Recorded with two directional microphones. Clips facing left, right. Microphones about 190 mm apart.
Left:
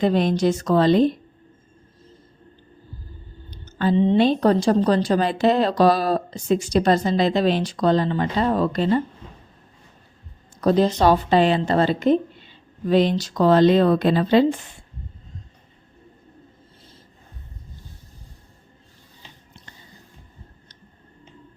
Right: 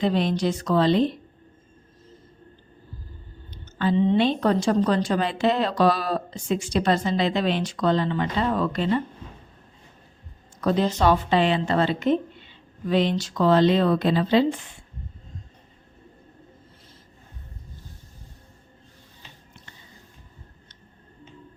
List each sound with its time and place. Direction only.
0.0 s speech: 45° left (ahead or behind)
3.5 s a woman's voice: 40° left (ahead or behind)
10.6 s a woman's voice: 35° left (ahead or behind)